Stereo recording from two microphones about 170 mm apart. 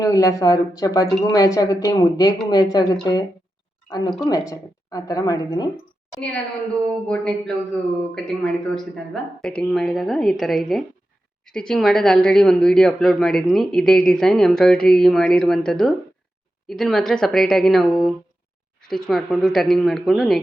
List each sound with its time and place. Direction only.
0.0 s a woman's voice: 20° left (ahead or behind)
6.1 s a woman's voice: 5° left (ahead or behind)